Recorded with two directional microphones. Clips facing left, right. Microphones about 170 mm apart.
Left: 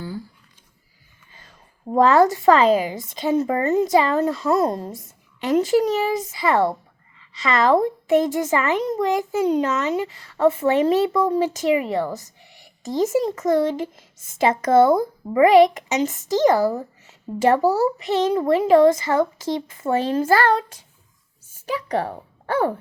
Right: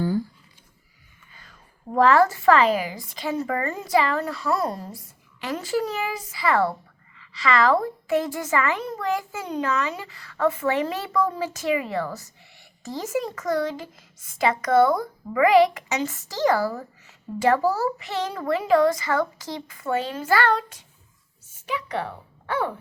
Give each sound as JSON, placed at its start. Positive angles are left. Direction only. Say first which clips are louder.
{"t": 1.3, "sound": "speech", "louder": "left 2 dB", "side_deg": 25}
{"t": 20.1, "sound": "speech", "louder": "left 5 dB", "side_deg": 35}
{"t": 21.7, "sound": "speech", "louder": "left 5 dB", "side_deg": 40}